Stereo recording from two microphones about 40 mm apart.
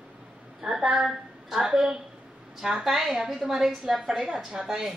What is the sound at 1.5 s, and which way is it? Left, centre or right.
Speech, centre.